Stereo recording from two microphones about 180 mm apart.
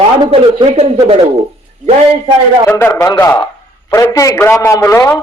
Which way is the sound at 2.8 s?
15° left (ahead or behind).